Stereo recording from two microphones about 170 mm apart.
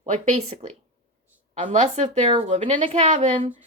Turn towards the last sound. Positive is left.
turn(degrees=-45)  # may be behind; listen again after turning